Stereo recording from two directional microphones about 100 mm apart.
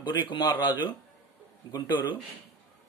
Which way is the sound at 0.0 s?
50° left (ahead or behind).